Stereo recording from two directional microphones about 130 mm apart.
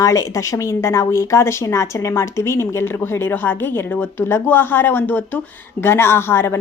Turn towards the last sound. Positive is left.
turn(degrees=20)  # may be behind; listen again after turning